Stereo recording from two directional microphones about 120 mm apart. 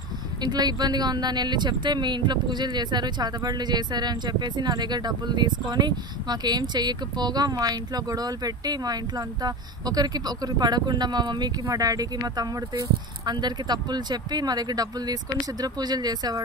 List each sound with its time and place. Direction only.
0.4 s speech: 35° right (ahead or behind)